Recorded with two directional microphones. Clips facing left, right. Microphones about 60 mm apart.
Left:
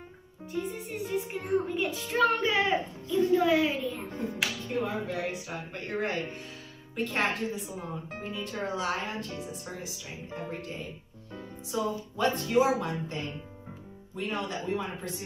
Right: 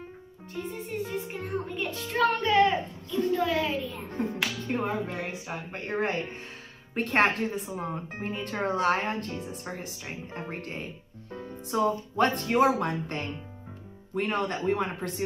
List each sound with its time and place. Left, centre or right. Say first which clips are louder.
0.5 s music: left 1 dB; centre
4.6 s music: right 2 dB; right
5.0 s speech: left 1 dB; right
7.0 s music: right 5 dB; right